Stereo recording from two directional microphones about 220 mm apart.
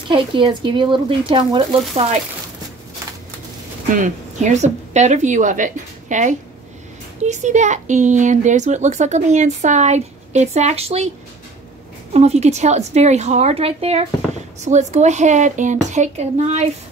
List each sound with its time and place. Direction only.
0.1 s a woman's voice: 20° right (ahead or behind)
3.9 s a woman's voice: 35° right (ahead or behind)
12.1 s a woman's voice: 30° right (ahead or behind)